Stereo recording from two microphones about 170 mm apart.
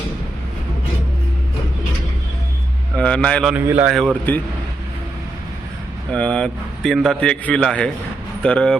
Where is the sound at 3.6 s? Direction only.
10° right (ahead or behind).